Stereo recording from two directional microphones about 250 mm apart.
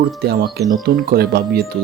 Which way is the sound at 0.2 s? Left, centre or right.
Right.